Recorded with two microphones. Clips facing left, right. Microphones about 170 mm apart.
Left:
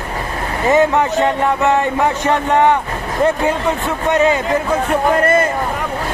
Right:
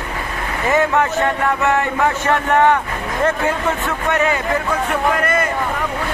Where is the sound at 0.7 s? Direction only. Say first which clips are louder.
Left 3 dB; 20° left (ahead or behind).